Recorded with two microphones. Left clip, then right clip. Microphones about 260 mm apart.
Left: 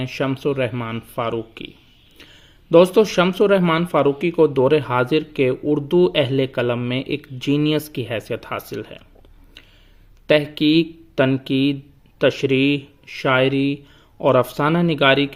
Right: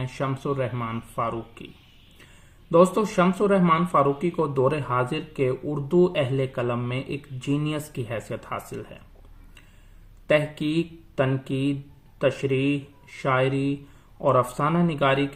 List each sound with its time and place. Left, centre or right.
0.0 s speech: left
2.6 s speech: left
10.2 s speech: left